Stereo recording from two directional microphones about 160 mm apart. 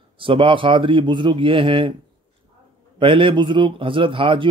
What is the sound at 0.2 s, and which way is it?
A man's voice, 30° right (ahead or behind).